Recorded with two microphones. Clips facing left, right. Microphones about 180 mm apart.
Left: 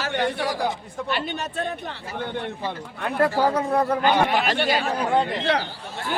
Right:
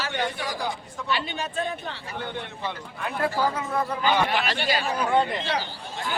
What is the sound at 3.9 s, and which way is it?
A man's voice, 55° left (ahead or behind).